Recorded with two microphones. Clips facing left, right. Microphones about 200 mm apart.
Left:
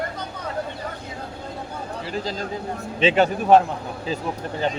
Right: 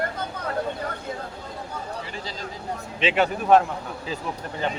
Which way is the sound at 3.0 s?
30° left (ahead or behind).